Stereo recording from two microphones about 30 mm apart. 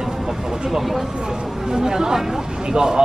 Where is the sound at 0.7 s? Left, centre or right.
Centre.